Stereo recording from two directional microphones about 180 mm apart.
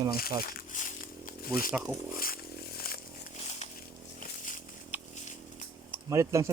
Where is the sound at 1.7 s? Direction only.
10° right (ahead or behind).